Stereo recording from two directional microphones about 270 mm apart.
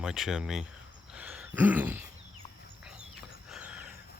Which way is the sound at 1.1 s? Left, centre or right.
Centre.